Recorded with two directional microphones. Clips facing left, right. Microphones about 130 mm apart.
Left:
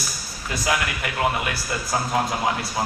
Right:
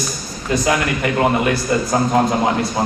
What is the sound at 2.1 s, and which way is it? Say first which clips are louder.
Speech: right 6 dB; 50° right (ahead or behind).